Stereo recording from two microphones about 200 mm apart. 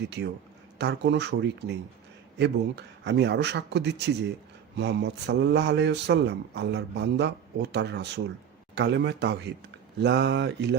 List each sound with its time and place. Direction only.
0.2 s speech: 55° right (ahead or behind)